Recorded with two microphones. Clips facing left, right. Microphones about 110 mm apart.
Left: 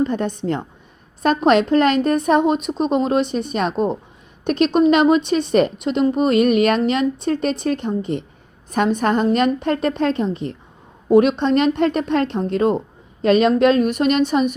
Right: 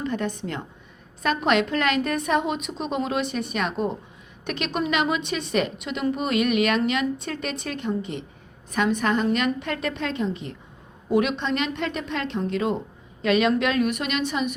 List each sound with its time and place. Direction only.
0.0 s a woman's voice: 35° left (ahead or behind)